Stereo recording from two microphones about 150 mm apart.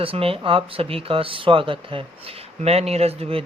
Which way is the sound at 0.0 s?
40° right (ahead or behind).